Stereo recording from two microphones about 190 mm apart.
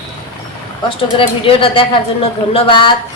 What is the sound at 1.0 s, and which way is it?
A woman's voice, 25° left (ahead or behind).